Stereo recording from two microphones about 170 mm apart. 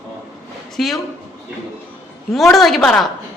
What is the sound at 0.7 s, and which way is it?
Speech, centre (ahead or behind).